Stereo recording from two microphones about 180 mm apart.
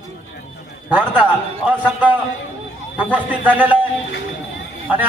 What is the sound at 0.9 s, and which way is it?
A man's voice, 5° right (ahead or behind).